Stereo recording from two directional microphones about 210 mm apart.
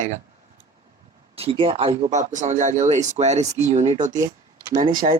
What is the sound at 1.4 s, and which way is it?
Speech, 25° right (ahead or behind).